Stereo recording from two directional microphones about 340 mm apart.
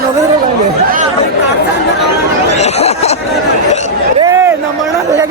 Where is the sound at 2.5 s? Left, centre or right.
Centre.